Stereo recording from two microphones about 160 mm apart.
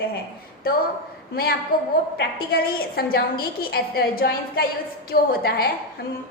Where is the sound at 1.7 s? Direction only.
70° left (ahead or behind).